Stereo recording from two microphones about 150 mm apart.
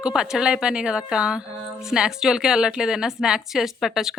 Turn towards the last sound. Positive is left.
turn(degrees=0)  # may be behind; listen again after turning